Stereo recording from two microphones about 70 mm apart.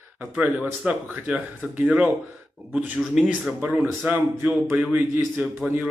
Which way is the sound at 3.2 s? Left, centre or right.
Centre.